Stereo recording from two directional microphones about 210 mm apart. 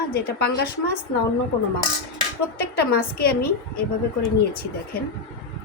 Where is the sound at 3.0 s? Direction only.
45° left (ahead or behind).